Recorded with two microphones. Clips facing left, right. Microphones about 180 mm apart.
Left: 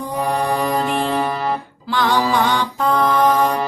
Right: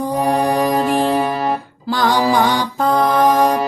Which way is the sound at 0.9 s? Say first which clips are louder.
Right 4 dB; 35° right (ahead or behind).